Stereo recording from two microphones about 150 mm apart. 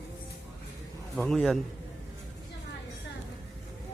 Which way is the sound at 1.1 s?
Centre (ahead or behind).